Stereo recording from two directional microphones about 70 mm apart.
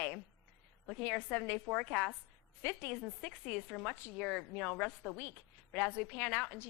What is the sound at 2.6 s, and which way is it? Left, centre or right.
Speech, left.